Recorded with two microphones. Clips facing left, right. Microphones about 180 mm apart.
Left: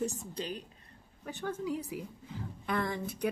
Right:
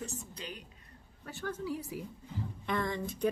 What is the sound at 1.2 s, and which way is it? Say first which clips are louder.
Speech: left 2 dB; 15° left (ahead or behind).